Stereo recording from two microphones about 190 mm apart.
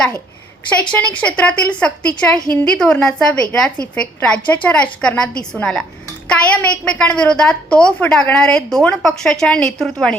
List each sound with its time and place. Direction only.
0.9 s a woman's voice: 5° left (ahead or behind)